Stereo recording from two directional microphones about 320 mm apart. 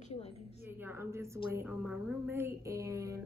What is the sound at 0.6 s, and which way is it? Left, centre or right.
Speech, centre.